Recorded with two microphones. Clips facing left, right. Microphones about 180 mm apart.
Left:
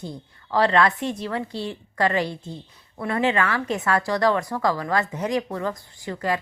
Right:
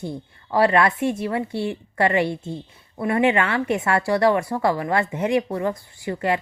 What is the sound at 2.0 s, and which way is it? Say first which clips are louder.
A woman's voice: right 3 dB; 25° right (ahead or behind).